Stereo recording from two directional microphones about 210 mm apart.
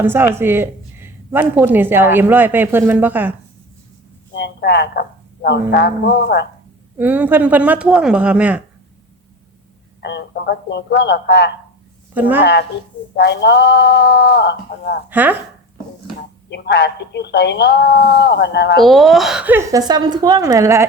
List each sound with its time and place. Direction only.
0.0 s speech: 10° right (ahead or behind)
4.4 s speech: 55° left (ahead or behind)
6.9 s speech: 10° right (ahead or behind)
10.0 s speech: 50° left (ahead or behind)
13.1 s speech: 55° left (ahead or behind)
15.1 s speech: 10° right (ahead or behind)
16.5 s speech: 55° left (ahead or behind)
18.8 s speech: centre (ahead or behind)